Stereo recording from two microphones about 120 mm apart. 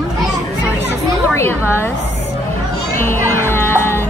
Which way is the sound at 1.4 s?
20° left (ahead or behind).